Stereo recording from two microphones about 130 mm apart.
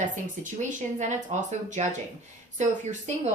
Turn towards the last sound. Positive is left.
turn(degrees=-65)  # may be behind; listen again after turning